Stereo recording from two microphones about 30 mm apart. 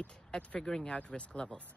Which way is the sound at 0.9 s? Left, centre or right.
Left.